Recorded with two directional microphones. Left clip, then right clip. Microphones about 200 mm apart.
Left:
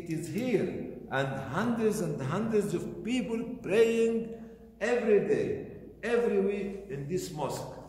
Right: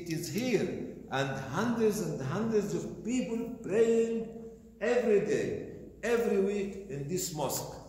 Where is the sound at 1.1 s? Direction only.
45° left (ahead or behind).